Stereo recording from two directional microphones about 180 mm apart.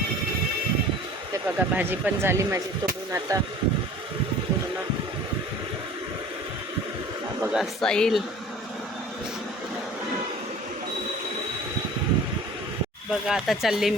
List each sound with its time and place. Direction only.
1.5 s speech: 10° right (ahead or behind)
7.5 s speech: centre (ahead or behind)
13.1 s speech: centre (ahead or behind)